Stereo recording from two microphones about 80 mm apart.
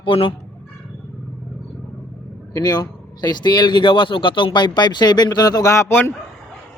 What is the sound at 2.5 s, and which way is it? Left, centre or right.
Speech, left.